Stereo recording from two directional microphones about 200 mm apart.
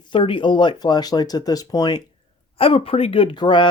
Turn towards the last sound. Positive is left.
turn(degrees=25)  # may be behind; listen again after turning